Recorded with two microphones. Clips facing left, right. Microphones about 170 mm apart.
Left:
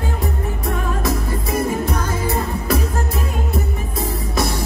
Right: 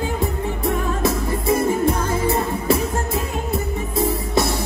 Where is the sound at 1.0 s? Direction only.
30° right (ahead or behind).